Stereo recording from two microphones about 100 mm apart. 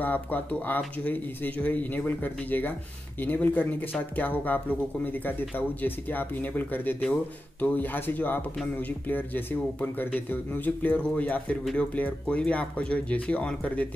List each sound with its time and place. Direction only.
0.0 s speech: 20° left (ahead or behind)